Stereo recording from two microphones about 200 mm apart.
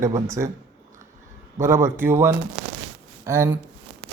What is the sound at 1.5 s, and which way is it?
A man's voice, 15° right (ahead or behind).